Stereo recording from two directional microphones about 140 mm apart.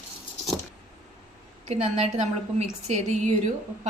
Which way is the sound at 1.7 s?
50° right (ahead or behind).